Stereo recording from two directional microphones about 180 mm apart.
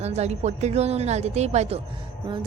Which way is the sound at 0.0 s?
35° right (ahead or behind).